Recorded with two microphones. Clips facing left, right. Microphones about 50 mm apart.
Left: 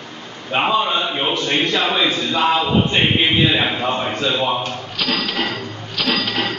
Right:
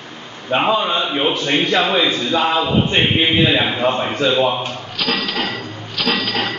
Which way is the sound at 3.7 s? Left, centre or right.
Centre.